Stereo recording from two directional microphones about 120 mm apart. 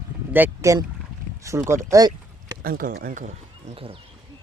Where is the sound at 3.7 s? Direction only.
50° right (ahead or behind).